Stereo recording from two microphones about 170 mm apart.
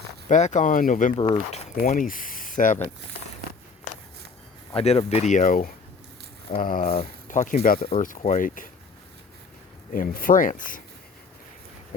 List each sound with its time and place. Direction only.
0.3 s speech: 45° left (ahead or behind)
1.1 s speech: 30° left (ahead or behind)
1.7 s speech: 55° left (ahead or behind)
4.7 s speech: 35° left (ahead or behind); by 6.8 s 55° left (ahead or behind)
6.8 s speech: 40° left (ahead or behind)
9.9 s speech: 55° left (ahead or behind)